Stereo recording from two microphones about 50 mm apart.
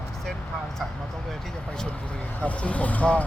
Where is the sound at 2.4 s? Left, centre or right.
Left.